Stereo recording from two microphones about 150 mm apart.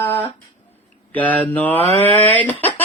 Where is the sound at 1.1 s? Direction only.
10° left (ahead or behind).